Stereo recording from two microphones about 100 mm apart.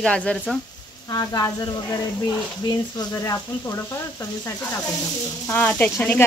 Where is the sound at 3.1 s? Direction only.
30° left (ahead or behind).